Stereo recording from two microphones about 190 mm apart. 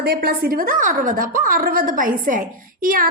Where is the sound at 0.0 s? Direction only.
50° right (ahead or behind).